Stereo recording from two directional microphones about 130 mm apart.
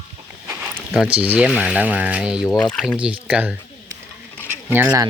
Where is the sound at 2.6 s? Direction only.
5° left (ahead or behind).